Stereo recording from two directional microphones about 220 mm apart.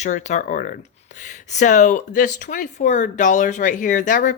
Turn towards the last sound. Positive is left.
turn(degrees=35)  # may be behind; listen again after turning